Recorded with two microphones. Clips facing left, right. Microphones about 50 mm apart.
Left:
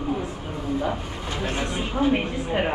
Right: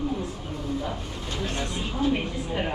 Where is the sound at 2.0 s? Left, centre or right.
Left.